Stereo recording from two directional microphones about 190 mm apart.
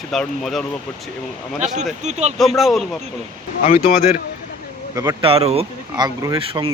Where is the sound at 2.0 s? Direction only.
35° right (ahead or behind).